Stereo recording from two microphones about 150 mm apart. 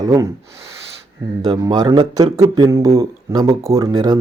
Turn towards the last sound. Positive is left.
turn(degrees=-25)  # may be behind; listen again after turning